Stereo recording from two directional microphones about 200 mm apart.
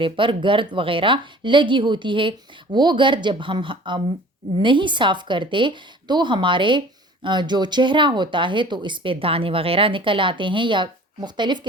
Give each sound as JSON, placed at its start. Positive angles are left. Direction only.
{"t": 0.0, "sound": "a woman's voice", "side_deg": -25}